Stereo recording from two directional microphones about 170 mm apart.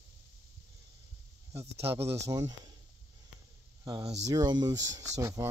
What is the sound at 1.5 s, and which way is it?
Speech, 15° right (ahead or behind).